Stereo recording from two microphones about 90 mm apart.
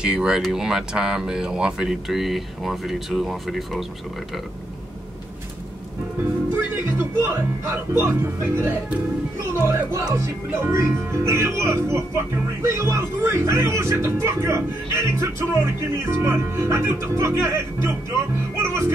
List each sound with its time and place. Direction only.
0.0 s speech: 10° right (ahead or behind)
6.8 s speech: 25° right (ahead or behind)